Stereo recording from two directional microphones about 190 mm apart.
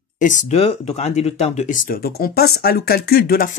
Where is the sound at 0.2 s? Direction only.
40° left (ahead or behind).